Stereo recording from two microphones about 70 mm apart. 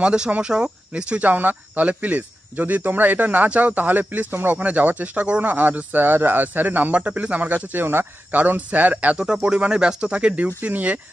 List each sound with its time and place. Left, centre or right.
0.0 s speech: centre
9.2 s speech: centre